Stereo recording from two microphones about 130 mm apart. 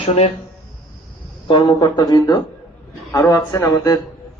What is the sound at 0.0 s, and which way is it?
Speech, 65° left (ahead or behind).